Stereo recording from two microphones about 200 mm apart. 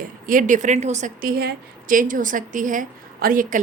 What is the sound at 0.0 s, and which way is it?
A woman's voice, 40° right (ahead or behind).